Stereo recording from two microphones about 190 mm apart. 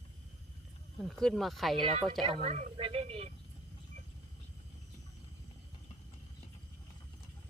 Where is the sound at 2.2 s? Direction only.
30° right (ahead or behind).